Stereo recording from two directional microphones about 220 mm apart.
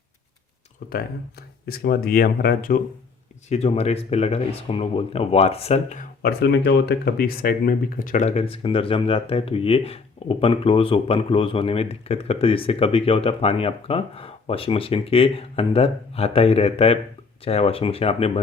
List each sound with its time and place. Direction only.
0.9 s speech: 45° left (ahead or behind); by 18.3 s 25° left (ahead or behind)